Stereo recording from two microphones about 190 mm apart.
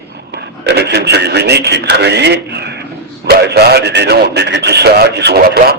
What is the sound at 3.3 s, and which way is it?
Radio, 55° right (ahead or behind).